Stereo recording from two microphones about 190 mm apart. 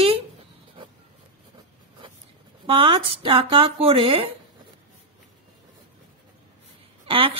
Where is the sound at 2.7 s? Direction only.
30° right (ahead or behind).